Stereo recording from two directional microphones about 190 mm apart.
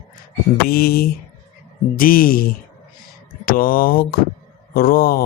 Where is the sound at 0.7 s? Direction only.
50° left (ahead or behind).